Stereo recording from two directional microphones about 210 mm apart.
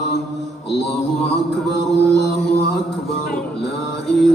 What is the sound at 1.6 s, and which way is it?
Music, centre (ahead or behind).